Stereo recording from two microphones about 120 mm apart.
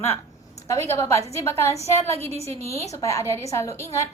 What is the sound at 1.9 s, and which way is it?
Speech, 60° right (ahead or behind).